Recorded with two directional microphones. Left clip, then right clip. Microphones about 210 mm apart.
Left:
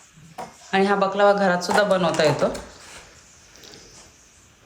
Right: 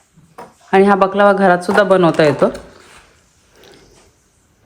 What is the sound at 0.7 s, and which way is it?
Speech, 30° right (ahead or behind).